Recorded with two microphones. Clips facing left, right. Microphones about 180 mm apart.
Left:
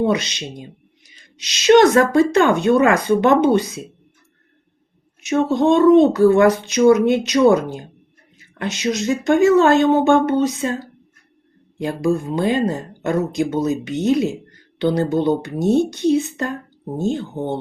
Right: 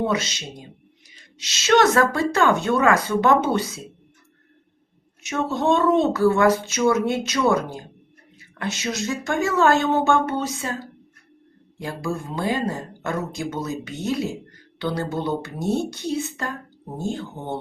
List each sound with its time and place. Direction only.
0.1 s speech: 20° left (ahead or behind)
5.5 s speech: 15° left (ahead or behind)
11.8 s speech: 20° left (ahead or behind)